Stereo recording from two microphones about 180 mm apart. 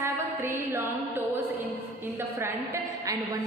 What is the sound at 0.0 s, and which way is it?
Music, 15° right (ahead or behind).